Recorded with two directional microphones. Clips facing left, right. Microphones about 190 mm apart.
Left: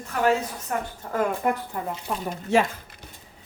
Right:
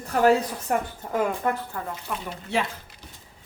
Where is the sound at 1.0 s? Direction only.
20° right (ahead or behind).